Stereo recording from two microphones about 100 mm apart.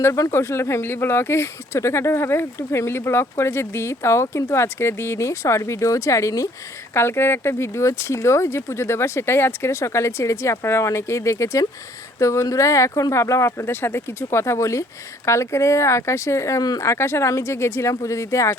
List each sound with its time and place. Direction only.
0.0 s speech: 30° left (ahead or behind)